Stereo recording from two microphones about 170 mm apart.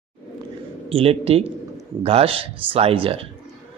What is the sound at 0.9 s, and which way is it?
Speech, 35° right (ahead or behind).